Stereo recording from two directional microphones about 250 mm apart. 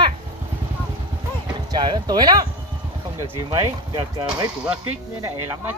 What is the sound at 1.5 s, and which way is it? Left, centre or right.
Speech, centre.